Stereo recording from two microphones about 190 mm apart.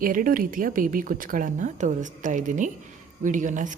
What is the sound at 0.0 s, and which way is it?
A woman's voice, 45° right (ahead or behind).